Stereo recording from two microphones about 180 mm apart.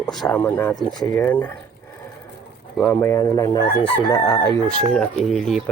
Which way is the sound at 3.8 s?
30° left (ahead or behind).